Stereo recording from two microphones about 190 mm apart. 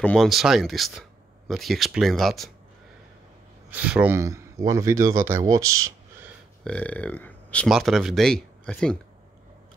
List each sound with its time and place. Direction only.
0.0 s speech: centre (ahead or behind)
3.7 s speech: 10° right (ahead or behind)
6.6 s speech: 5° left (ahead or behind)